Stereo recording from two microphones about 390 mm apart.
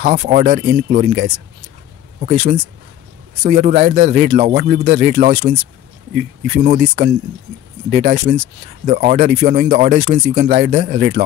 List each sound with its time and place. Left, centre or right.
0.0 s speech: right